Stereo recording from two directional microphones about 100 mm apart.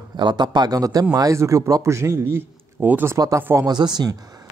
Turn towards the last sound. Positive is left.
turn(degrees=-45)  # may be behind; listen again after turning